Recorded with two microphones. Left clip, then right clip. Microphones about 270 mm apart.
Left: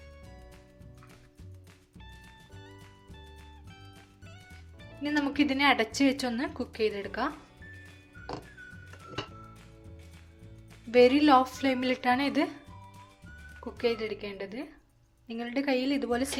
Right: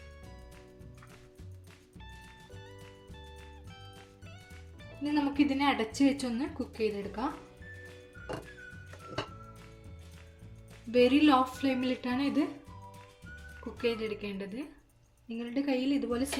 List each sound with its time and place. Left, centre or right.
2.0 s music: centre
5.1 s speech: left
10.9 s speech: left
13.7 s speech: left